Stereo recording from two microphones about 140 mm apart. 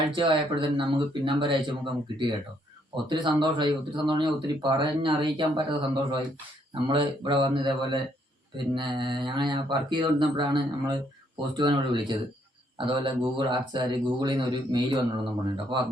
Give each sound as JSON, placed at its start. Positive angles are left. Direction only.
{"t": 0.8, "sound": "speech", "side_deg": -35}